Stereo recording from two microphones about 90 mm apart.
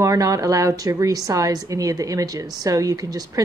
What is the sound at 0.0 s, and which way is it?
A woman's voice, 40° right (ahead or behind).